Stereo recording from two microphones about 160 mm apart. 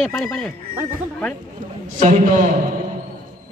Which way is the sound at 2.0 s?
50° right (ahead or behind).